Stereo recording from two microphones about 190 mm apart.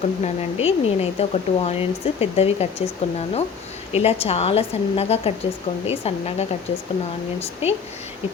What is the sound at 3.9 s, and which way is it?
Speech, 35° left (ahead or behind).